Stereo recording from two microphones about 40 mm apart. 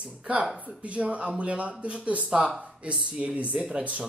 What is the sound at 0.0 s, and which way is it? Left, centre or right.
Speech, right.